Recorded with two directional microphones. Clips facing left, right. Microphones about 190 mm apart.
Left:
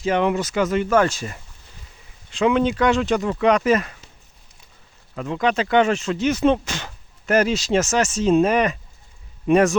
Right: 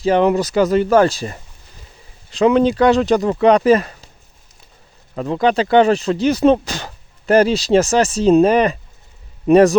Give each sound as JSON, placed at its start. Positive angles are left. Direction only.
{"t": 0.0, "sound": "speech", "side_deg": -35}
{"t": 5.1, "sound": "speech", "side_deg": -35}